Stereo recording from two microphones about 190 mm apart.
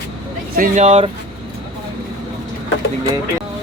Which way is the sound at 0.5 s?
45° right (ahead or behind).